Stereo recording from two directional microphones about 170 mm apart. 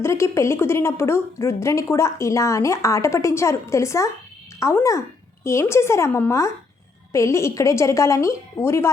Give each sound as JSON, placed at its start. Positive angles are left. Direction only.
{"t": 0.0, "sound": "a woman's voice", "side_deg": 15}